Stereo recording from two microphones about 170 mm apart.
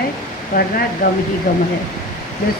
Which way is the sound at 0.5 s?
55° left (ahead or behind).